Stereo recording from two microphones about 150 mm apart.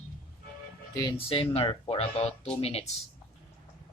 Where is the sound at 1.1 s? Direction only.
40° left (ahead or behind).